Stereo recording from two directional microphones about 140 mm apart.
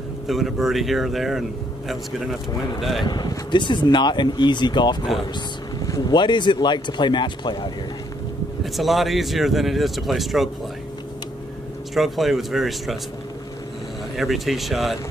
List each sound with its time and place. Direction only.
0.3 s speech: centre (ahead or behind)
2.8 s speech: centre (ahead or behind)
3.1 s speech: 30° left (ahead or behind)
8.7 s speech: centre (ahead or behind)
11.9 s speech: centre (ahead or behind)
14.1 s speech: centre (ahead or behind)